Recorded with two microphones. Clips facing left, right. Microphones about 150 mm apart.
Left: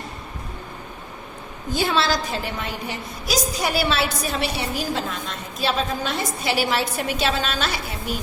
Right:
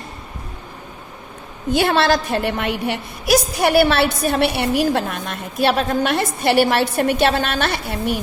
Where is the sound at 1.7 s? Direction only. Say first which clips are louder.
Right 5 dB; 60° right (ahead or behind).